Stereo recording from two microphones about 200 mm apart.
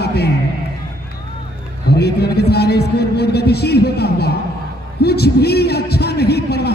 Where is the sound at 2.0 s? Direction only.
55° left (ahead or behind).